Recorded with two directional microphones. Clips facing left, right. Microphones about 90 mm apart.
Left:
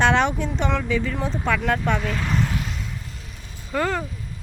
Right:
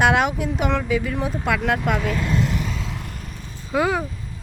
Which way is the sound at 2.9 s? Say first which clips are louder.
Right 4 dB; 75° right (ahead or behind).